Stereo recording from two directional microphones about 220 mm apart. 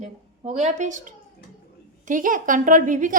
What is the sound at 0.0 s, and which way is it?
A woman's voice, 30° right (ahead or behind).